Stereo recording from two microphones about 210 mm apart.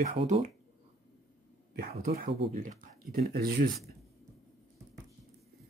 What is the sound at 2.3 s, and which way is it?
Speech, 30° right (ahead or behind).